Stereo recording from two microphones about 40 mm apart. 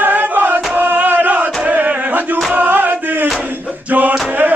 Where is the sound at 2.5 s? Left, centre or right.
Right.